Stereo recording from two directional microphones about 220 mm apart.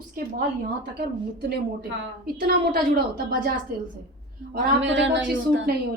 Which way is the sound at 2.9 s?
45° right (ahead or behind).